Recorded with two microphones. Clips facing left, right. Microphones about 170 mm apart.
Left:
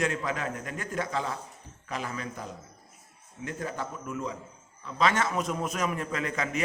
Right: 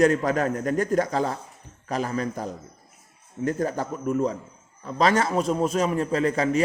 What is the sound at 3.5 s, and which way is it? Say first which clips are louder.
A man's voice: right 9 dB; 40° right (ahead or behind).